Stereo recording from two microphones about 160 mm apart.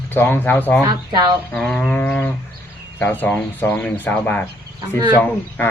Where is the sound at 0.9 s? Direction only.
25° right (ahead or behind).